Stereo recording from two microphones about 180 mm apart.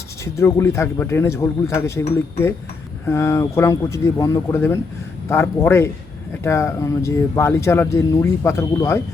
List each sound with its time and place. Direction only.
0.3 s speech: 15° left (ahead or behind)
3.1 s speech: 15° left (ahead or behind)